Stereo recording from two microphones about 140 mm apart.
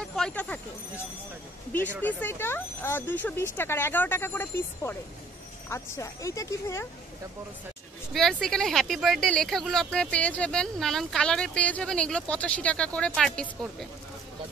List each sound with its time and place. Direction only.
0.0 s a sound: 5° left (ahead or behind)
2.0 s speech: 15° left (ahead or behind)
8.1 s speech: 5° left (ahead or behind)